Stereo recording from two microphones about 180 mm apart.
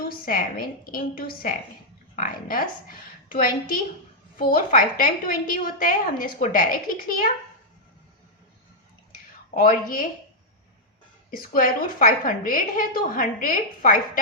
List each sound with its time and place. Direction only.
0.0 s a woman's voice: 50° left (ahead or behind)
9.6 s a woman's voice: 50° left (ahead or behind)
11.3 s a woman's voice: 50° left (ahead or behind)